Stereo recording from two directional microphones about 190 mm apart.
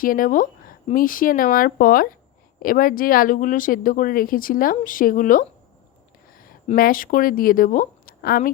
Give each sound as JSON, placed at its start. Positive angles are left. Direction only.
{"t": 0.0, "sound": "speech", "side_deg": 45}
{"t": 6.7, "sound": "speech", "side_deg": 50}